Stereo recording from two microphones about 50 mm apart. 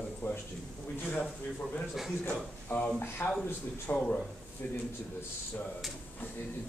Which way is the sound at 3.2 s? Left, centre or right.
Left.